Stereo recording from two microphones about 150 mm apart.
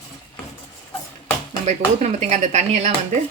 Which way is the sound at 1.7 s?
50° right (ahead or behind).